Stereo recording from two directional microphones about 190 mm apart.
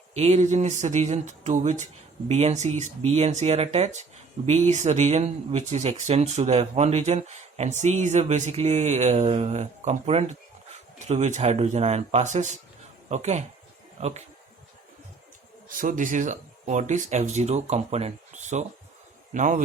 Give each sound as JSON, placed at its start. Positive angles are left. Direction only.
{"t": 0.1, "sound": "speech", "side_deg": -35}
{"t": 15.7, "sound": "speech", "side_deg": -45}